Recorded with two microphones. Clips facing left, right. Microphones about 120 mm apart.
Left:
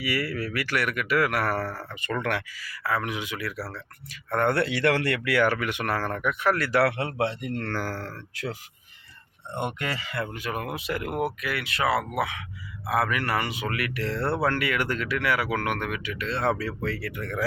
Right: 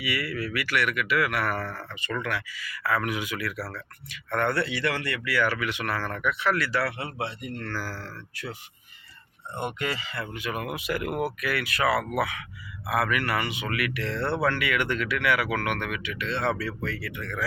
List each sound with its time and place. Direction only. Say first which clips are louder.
0.0 s speech: left 2 dB; 40° left (ahead or behind)
2.6 s speech: right 1 dB; 30° left (ahead or behind)
4.5 s speech: left 4 dB; 65° left (ahead or behind)
5.4 s speech: left 1 dB; 50° left (ahead or behind)
10.1 s speech: left 2 dB; 55° left (ahead or behind)